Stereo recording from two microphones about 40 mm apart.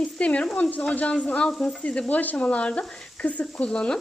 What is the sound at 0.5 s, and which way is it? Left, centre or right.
Speech, left.